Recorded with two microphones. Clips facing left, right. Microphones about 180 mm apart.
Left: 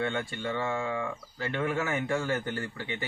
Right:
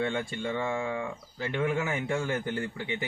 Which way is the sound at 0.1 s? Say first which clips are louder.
Right 1 dB; 15° right (ahead or behind).